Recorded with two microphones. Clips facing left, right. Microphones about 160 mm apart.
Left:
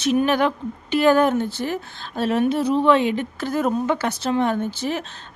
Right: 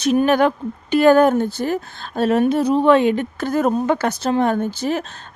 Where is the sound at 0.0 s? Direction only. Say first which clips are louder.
Right 3 dB; 40° right (ahead or behind).